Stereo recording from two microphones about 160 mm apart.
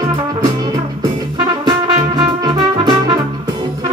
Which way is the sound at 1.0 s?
25° right (ahead or behind).